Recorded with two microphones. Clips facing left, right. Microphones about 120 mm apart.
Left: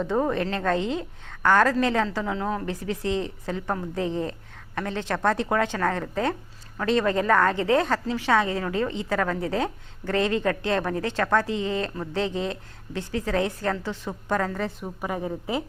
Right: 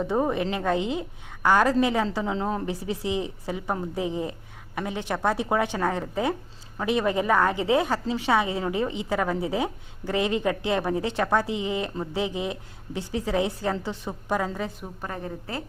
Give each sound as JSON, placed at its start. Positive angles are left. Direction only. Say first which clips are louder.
{"t": 0.0, "sound": "a woman's voice", "louder": "even", "side_deg": -15}
{"t": 2.8, "sound": "a woman's voice", "louder": "left 1 dB", "side_deg": -15}
{"t": 15.0, "sound": "a woman's voice", "louder": "left 5 dB", "side_deg": 15}